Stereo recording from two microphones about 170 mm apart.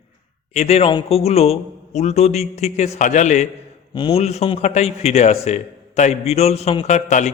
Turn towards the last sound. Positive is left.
turn(degrees=45)  # may be behind; listen again after turning